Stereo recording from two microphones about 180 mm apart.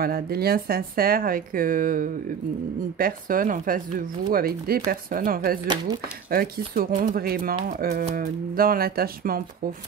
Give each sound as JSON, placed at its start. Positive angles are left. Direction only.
{"t": 0.0, "sound": "speech", "side_deg": -55}
{"t": 8.5, "sound": "speech", "side_deg": -55}